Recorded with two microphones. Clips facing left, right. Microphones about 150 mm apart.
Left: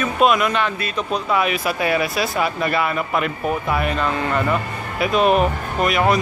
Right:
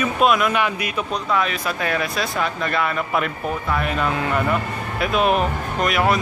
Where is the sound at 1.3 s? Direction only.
10° left (ahead or behind).